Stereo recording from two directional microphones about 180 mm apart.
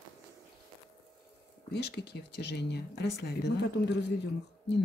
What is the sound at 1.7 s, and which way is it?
Speech, 70° left (ahead or behind).